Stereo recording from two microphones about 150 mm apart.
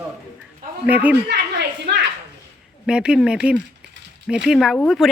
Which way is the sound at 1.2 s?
90° right.